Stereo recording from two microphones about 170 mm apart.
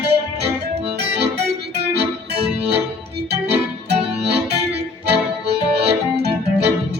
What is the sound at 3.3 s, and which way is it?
Music, 75° right (ahead or behind).